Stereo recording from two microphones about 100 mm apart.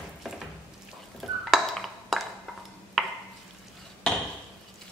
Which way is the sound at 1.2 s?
Centre (ahead or behind).